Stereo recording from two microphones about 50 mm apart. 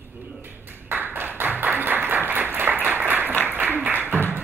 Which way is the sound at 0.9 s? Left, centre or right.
Right.